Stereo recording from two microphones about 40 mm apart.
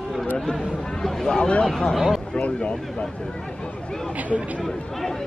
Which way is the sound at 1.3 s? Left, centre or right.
Left.